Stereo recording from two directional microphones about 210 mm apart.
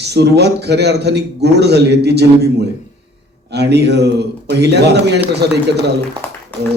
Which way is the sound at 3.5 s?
50° right (ahead or behind).